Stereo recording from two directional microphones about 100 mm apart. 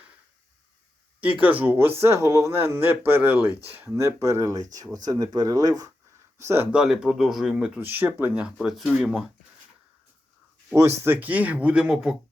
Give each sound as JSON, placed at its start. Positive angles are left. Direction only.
{"t": 1.2, "sound": "speech", "side_deg": -15}
{"t": 3.8, "sound": "speech", "side_deg": -25}
{"t": 6.4, "sound": "speech", "side_deg": -25}
{"t": 6.7, "sound": "speech", "side_deg": -5}
{"t": 7.8, "sound": "speech", "side_deg": -20}
{"t": 8.5, "sound": "speech", "side_deg": 0}
{"t": 11.0, "sound": "speech", "side_deg": -20}